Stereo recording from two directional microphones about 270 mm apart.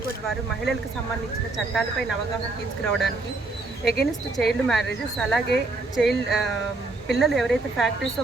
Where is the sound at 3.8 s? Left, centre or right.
Centre.